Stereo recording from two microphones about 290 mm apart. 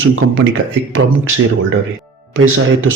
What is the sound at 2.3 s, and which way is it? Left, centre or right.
Speech, right.